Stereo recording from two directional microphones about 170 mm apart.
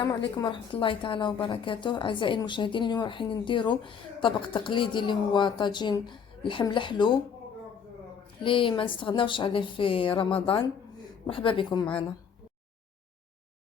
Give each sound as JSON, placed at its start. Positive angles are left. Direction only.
{"t": 0.0, "sound": "a woman's voice", "side_deg": 25}
{"t": 8.4, "sound": "a woman's voice", "side_deg": 30}